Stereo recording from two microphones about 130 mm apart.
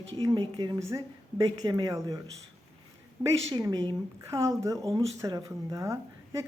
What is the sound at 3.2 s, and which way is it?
Speech, 25° right (ahead or behind).